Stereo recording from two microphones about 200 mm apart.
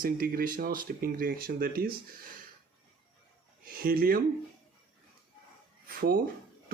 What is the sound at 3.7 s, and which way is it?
Speech, 45° right (ahead or behind).